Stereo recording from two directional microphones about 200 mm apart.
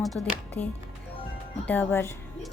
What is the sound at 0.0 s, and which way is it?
Speech, 5° left (ahead or behind).